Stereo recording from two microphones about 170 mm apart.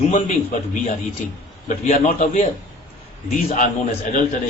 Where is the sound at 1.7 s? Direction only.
45° left (ahead or behind).